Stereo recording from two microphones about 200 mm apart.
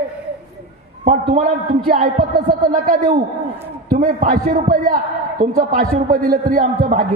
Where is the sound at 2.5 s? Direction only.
45° right (ahead or behind).